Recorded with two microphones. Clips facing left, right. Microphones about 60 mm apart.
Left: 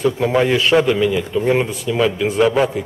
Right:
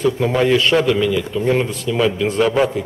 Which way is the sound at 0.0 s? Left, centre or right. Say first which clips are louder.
Even; centre.